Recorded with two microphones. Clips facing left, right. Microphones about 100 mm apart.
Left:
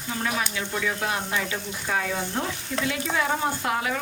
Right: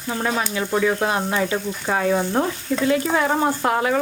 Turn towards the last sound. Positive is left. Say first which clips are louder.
# right 7 dB
turn(degrees=-40)  # may be behind; listen again after turning